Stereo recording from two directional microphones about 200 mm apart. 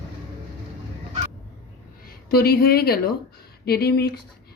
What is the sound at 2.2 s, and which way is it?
Speech, 50° left (ahead or behind).